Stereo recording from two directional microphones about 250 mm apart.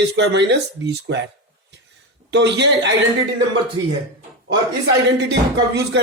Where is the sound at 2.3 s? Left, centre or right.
Right.